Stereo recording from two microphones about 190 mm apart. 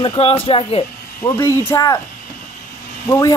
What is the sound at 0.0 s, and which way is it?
Speech, 30° left (ahead or behind).